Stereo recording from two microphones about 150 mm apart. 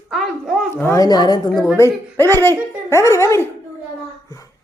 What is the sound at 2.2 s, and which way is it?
Speech, 15° left (ahead or behind).